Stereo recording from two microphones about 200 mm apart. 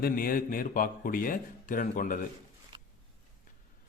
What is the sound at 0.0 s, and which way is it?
A man's voice, 45° left (ahead or behind).